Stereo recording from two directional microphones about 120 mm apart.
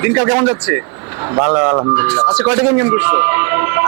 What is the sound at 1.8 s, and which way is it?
Speech, 30° right (ahead or behind).